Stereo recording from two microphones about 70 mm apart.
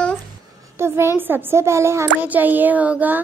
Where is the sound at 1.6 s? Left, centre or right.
Right.